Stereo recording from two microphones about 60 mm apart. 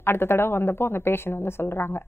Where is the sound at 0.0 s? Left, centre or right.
Left.